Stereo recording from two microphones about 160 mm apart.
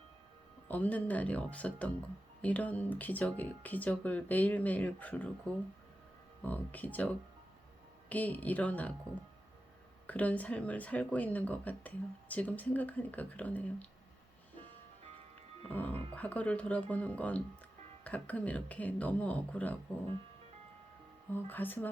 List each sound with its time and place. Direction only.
0.7 s speech: 10° left (ahead or behind)
10.1 s speech: 10° left (ahead or behind)
15.7 s speech: 10° left (ahead or behind)
21.3 s speech: 10° left (ahead or behind)